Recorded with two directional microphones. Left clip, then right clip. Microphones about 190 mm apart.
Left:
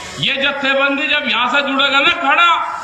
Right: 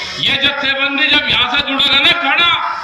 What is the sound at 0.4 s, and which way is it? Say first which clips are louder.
A man's voice: even; 45° left (ahead or behind).